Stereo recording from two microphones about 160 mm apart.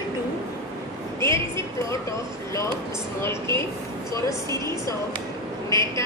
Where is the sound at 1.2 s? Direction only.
20° left (ahead or behind).